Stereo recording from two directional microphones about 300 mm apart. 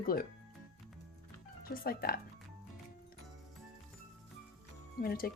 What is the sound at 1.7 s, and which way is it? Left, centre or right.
Speech, left.